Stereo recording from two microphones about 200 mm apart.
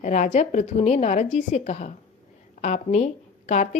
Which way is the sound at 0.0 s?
35° left (ahead or behind).